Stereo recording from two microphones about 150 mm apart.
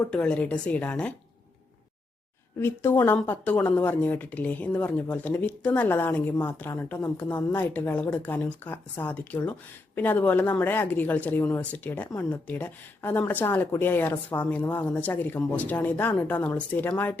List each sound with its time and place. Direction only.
0.1 s speech: 10° left (ahead or behind)
2.6 s speech: 15° left (ahead or behind)